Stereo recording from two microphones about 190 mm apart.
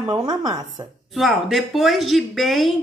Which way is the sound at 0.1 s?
20° right (ahead or behind).